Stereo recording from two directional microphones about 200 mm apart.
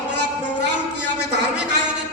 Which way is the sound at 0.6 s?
60° right (ahead or behind).